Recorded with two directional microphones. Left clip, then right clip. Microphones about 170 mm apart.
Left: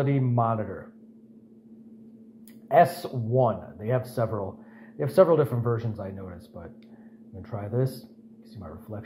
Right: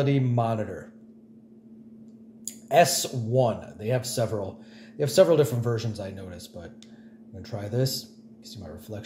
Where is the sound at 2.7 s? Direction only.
10° right (ahead or behind).